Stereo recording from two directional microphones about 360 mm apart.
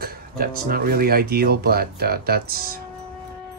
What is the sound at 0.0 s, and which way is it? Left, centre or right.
Speech, right.